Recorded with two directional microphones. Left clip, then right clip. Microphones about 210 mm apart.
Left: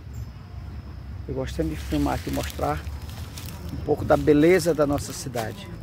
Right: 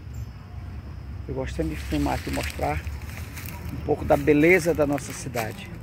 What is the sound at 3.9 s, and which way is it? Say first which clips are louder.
Speech: left 1 dB; 10° left (ahead or behind).